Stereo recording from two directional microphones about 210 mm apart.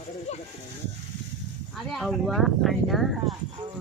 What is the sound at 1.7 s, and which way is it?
Speech, centre (ahead or behind).